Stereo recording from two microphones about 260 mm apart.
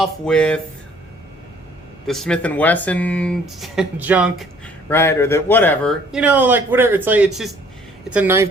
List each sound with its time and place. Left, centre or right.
0.0 s speech: centre
2.0 s speech: centre